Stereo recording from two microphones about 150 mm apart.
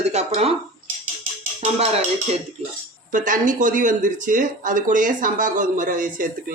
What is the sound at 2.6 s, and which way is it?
Speech, 40° right (ahead or behind).